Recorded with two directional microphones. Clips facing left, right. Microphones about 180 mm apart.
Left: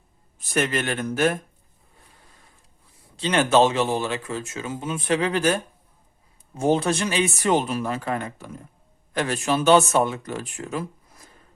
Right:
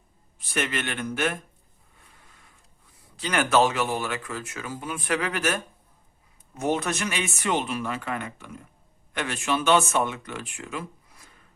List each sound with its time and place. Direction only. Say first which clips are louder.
0.3 s speech: left 5 dB; 40° left (ahead or behind)
3.2 s speech: left 4 dB; 25° left (ahead or behind)